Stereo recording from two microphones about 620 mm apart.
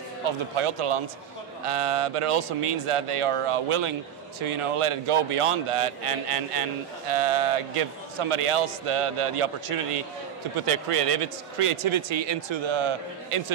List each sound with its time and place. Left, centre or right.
0.2 s a man's voice: right